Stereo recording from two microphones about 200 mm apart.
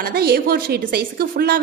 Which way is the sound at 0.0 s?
50° right (ahead or behind).